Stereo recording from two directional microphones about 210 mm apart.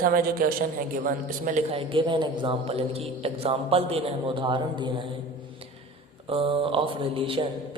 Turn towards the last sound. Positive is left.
turn(degrees=-25)  # may be behind; listen again after turning